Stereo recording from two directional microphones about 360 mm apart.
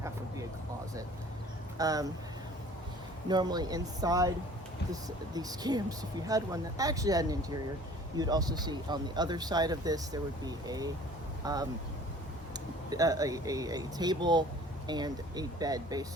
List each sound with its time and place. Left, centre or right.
1.8 s speech: centre
3.2 s speech: centre
12.9 s speech: centre